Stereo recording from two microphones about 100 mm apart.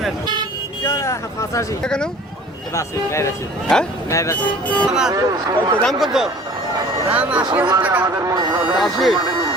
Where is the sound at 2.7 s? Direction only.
30° left (ahead or behind).